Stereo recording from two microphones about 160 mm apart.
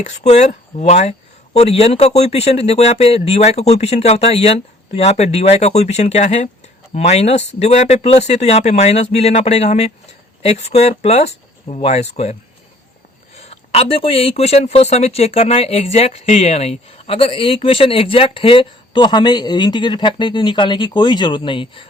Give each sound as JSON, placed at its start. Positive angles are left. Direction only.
{"t": 0.0, "sound": "speech", "side_deg": 45}